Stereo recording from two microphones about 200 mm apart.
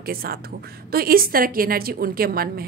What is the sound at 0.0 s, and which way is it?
A woman's voice, 50° right (ahead or behind).